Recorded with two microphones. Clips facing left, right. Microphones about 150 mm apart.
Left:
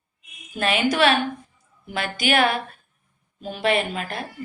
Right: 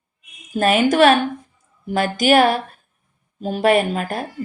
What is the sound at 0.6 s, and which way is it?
A woman's voice, 45° right (ahead or behind).